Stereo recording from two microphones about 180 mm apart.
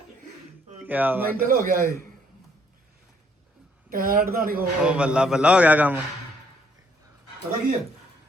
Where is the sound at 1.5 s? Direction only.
50° right (ahead or behind).